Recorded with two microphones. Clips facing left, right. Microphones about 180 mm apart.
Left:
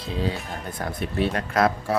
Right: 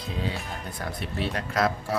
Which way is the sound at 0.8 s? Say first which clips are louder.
Left 6 dB; 50° left (ahead or behind).